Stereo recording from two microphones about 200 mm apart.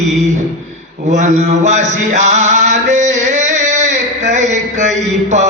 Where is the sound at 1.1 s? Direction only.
35° right (ahead or behind).